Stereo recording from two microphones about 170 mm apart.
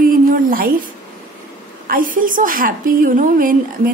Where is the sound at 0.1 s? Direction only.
55° right (ahead or behind).